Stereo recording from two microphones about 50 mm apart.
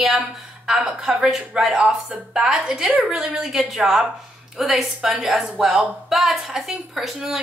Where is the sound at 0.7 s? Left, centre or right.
Centre.